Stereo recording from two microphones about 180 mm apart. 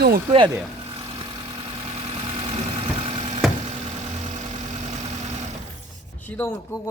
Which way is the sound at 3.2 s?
35° right (ahead or behind).